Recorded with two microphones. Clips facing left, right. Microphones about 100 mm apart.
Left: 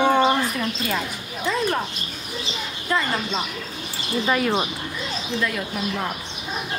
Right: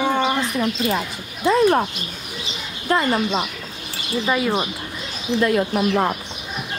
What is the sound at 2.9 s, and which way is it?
Speech, 45° right (ahead or behind).